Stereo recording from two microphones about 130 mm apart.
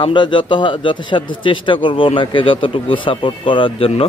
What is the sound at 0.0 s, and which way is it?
A man's voice, 40° left (ahead or behind).